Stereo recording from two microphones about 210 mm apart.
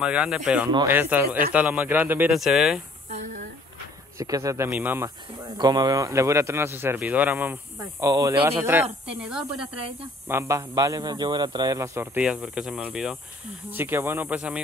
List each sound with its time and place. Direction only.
0.0 s speech: 5° right (ahead or behind)
0.7 s speech: 20° right (ahead or behind)
0.9 s a man's voice: 10° right (ahead or behind)
3.1 s a sound: 35° right (ahead or behind)
4.2 s a man's voice: 15° right (ahead or behind)